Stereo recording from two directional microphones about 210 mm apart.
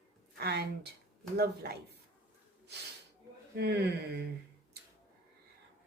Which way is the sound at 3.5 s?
55° right (ahead or behind).